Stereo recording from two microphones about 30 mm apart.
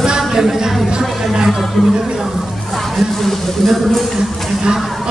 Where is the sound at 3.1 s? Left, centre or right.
Centre.